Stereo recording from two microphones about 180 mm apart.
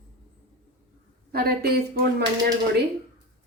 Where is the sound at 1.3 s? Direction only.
60° right (ahead or behind).